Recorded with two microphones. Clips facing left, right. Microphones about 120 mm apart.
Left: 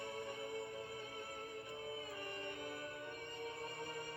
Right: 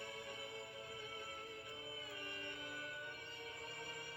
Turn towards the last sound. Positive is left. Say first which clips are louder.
# left 6 dB
turn(degrees=35)  # may be behind; listen again after turning